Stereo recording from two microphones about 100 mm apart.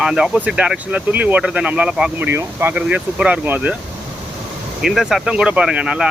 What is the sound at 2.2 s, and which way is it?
Speech, 20° right (ahead or behind).